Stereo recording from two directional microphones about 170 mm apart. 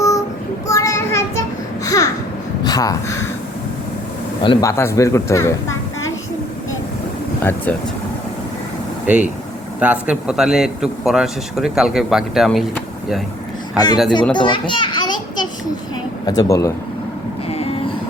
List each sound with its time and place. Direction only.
0.7 s child singing: 20° left (ahead or behind)
2.6 s speech: 20° left (ahead or behind)
4.4 s speech: 15° left (ahead or behind)
7.4 s speech: 10° left (ahead or behind)
9.1 s speech: 10° right (ahead or behind)
13.7 s speech: 25° left (ahead or behind)
14.3 s children playing: 30° left (ahead or behind)
16.2 s speech: 20° left (ahead or behind)